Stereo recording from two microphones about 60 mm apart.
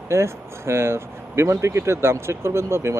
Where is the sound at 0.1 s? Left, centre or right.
Right.